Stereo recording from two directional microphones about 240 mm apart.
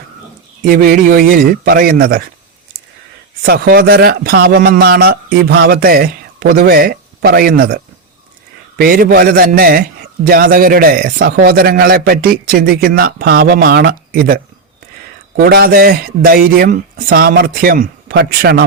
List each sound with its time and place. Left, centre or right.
0.6 s a man's voice: right
3.4 s a man's voice: right
15.4 s a man's voice: right